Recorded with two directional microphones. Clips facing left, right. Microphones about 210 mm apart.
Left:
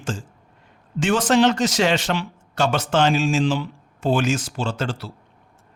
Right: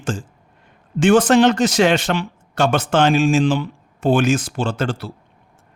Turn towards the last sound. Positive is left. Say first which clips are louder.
# right 4 dB
turn(degrees=-55)  # may be behind; listen again after turning